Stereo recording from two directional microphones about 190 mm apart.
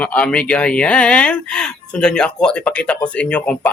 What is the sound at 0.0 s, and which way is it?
Speech, 5° left (ahead or behind).